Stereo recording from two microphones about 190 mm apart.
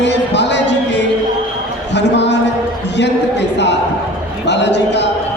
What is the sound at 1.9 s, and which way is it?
Speech, 65° left (ahead or behind).